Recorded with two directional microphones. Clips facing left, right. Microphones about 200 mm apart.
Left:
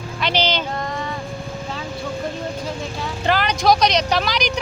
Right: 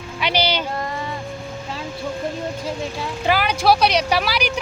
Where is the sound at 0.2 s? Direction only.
10° right (ahead or behind).